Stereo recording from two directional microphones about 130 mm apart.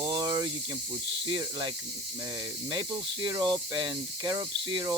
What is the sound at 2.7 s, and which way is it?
Speech, 35° right (ahead or behind).